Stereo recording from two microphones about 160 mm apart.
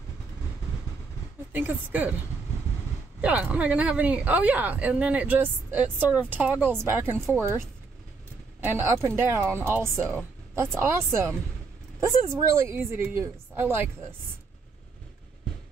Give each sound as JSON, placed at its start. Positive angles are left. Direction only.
{"t": 1.9, "sound": "a woman's voice", "side_deg": -10}
{"t": 3.2, "sound": "a woman's voice", "side_deg": -10}